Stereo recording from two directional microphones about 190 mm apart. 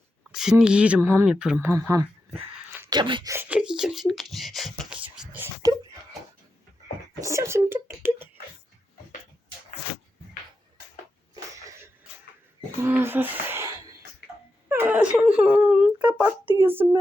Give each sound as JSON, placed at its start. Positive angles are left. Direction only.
{"t": 0.3, "sound": "a sound", "side_deg": 0}
{"t": 0.5, "sound": "speech", "side_deg": -5}
{"t": 3.3, "sound": "whispering", "side_deg": -5}
{"t": 7.2, "sound": "speech", "side_deg": -15}
{"t": 12.8, "sound": "speech", "side_deg": -10}
{"t": 14.7, "sound": "a sound", "side_deg": -10}